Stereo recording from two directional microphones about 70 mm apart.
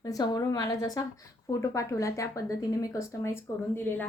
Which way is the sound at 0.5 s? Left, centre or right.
Left.